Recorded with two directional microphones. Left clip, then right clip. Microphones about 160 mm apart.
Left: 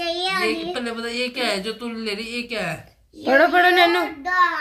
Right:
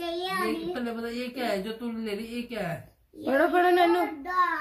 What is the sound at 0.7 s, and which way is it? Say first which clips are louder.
Speech: left 7 dB; 20° right (ahead or behind).